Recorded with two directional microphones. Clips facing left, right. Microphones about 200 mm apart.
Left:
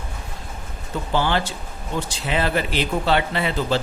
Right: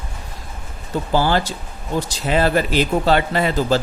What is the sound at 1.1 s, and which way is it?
Speech, 40° right (ahead or behind).